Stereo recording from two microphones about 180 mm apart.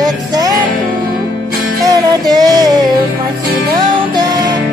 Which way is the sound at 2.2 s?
20° right (ahead or behind).